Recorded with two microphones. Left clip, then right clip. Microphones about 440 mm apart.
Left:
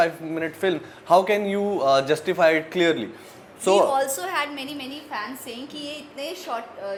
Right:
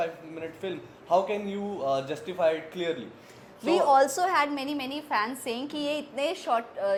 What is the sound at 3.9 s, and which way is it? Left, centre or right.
A woman's voice, right.